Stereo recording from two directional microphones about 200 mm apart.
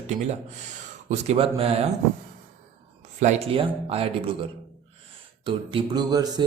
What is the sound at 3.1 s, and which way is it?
Speech, 35° right (ahead or behind).